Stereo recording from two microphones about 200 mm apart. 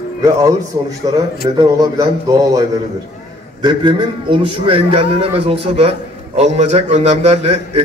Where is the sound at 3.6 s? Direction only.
25° right (ahead or behind).